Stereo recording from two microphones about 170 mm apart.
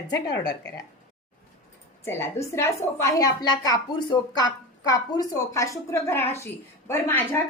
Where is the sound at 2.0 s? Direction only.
15° left (ahead or behind).